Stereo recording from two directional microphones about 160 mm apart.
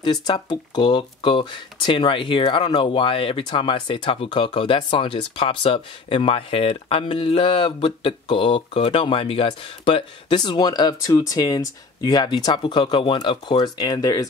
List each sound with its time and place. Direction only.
0.0 s speech: 30° left (ahead or behind)